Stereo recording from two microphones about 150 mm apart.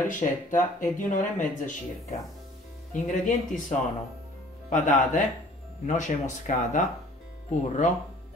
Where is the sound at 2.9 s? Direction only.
55° left (ahead or behind).